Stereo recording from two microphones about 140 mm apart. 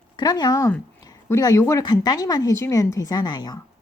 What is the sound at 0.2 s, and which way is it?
Speech, 30° left (ahead or behind).